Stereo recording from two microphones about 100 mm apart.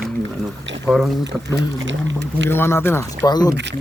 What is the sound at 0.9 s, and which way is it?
Speech, centre (ahead or behind).